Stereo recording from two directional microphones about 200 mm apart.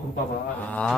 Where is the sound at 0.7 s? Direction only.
5° left (ahead or behind).